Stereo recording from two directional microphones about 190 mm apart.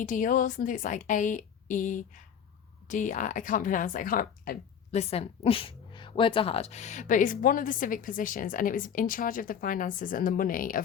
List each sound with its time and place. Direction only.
0.0 s a woman's voice: 45° left (ahead or behind)